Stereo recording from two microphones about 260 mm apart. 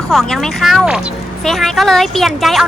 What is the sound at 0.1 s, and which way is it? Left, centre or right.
Speech, centre.